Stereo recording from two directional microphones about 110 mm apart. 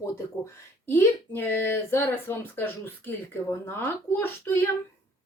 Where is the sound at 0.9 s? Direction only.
20° left (ahead or behind).